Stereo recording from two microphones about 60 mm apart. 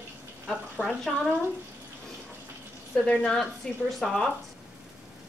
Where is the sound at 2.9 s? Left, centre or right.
Left.